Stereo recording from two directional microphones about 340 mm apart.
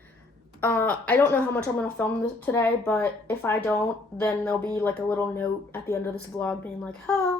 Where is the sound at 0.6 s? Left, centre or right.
Centre.